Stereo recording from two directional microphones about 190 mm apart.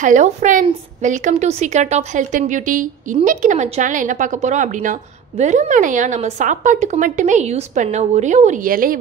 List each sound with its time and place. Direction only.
0.0 s speech: 40° right (ahead or behind)